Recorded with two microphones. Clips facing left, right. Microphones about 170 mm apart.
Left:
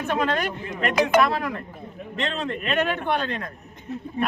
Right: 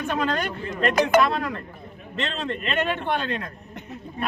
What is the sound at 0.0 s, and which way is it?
Speech, 5° left (ahead or behind).